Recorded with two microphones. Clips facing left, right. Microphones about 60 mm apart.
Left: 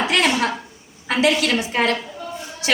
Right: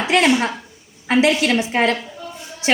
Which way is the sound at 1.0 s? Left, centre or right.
Right.